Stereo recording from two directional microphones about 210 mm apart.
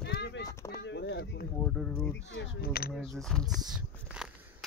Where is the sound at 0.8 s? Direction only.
55° left (ahead or behind).